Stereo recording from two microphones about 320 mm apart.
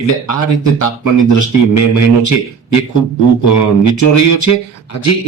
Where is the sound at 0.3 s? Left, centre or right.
Left.